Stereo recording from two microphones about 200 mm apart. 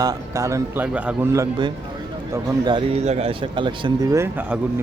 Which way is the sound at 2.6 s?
25° right (ahead or behind).